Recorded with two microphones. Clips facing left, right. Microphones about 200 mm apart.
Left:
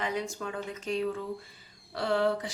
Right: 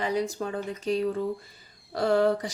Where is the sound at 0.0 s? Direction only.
35° right (ahead or behind).